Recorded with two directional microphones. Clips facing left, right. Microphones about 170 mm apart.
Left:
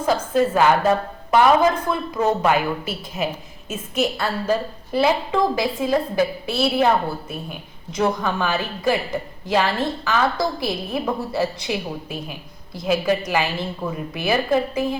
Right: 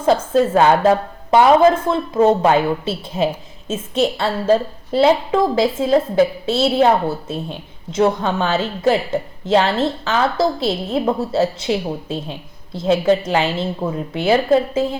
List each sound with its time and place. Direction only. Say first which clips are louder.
0.5 s a woman's voice: right 5 dB; 25° right (ahead or behind)